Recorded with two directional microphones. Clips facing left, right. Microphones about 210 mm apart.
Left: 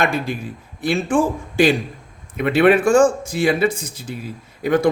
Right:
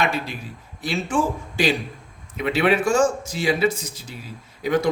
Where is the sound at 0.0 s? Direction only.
50° left (ahead or behind).